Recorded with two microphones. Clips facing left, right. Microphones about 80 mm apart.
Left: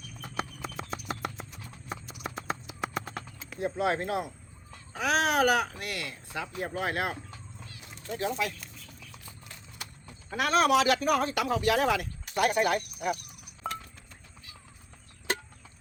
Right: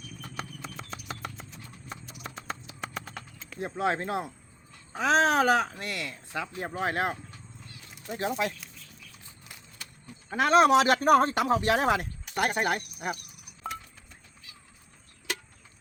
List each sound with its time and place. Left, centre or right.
0.2 s horse: centre
3.6 s a man's voice: right
10.2 s a man's voice: right
15.3 s a sound: left